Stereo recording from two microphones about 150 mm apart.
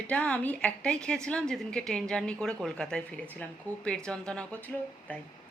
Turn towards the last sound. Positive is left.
turn(degrees=5)  # may be behind; listen again after turning